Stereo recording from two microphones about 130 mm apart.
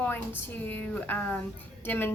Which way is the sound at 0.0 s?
15° left (ahead or behind).